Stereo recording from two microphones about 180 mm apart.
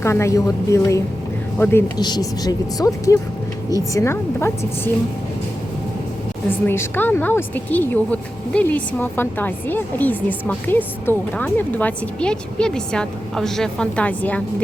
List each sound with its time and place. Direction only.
0.0 s speech: 15° left (ahead or behind)
2.0 s speech: 25° left (ahead or behind)
6.7 s speech: 10° left (ahead or behind)